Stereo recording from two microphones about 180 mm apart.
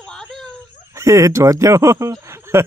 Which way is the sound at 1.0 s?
15° right (ahead or behind).